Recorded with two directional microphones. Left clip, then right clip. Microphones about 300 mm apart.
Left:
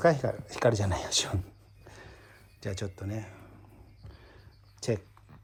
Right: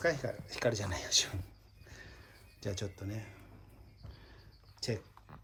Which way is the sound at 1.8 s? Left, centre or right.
Centre.